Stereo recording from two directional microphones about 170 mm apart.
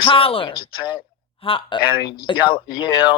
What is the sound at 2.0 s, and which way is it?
Speech, 60° left (ahead or behind).